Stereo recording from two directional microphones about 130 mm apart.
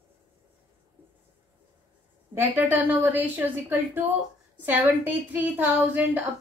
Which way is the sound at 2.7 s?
15° right (ahead or behind).